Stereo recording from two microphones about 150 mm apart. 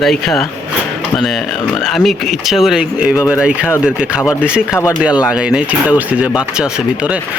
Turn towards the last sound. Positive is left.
turn(degrees=-10)  # may be behind; listen again after turning